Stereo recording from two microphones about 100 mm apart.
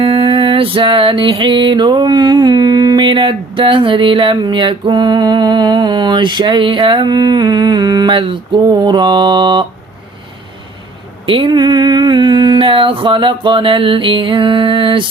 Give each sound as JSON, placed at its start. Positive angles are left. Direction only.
{"t": 0.0, "sound": "music", "side_deg": -65}
{"t": 8.6, "sound": "music", "side_deg": -40}
{"t": 11.3, "sound": "a sound", "side_deg": -60}